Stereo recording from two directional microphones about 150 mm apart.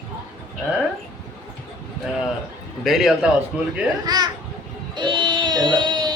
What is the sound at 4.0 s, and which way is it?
Speech, 25° right (ahead or behind).